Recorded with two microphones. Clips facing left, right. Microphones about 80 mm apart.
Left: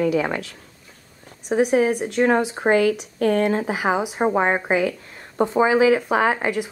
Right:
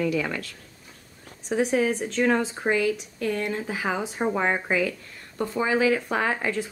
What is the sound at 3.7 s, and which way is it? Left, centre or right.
Speech, centre.